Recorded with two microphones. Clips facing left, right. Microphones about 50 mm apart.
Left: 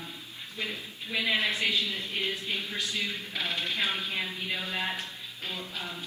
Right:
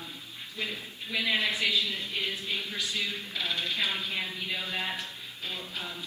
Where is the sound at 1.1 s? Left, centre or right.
Left.